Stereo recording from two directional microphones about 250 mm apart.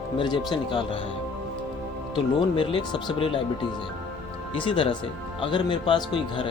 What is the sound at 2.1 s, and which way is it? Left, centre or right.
Speech, left.